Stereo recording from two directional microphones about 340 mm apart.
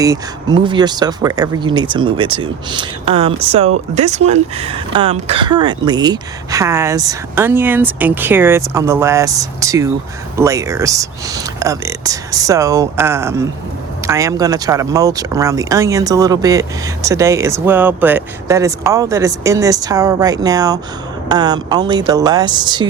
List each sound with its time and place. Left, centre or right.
0.0 s speech: centre